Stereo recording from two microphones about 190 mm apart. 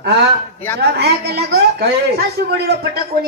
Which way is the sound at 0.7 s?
60° right (ahead or behind).